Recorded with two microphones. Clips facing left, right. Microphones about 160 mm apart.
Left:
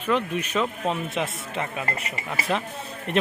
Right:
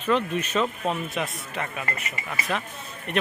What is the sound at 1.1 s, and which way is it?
Speech, 25° left (ahead or behind).